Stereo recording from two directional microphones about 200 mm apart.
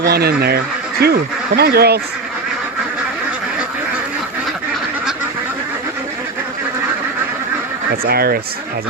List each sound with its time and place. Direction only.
0.0 s speech: 50° right (ahead or behind)
8.0 s speech: 50° right (ahead or behind)